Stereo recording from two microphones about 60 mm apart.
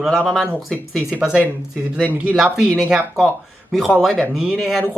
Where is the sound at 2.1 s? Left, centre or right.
Right.